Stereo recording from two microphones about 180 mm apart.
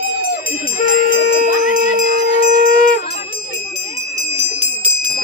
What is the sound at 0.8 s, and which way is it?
Jingle bell, 45° left (ahead or behind).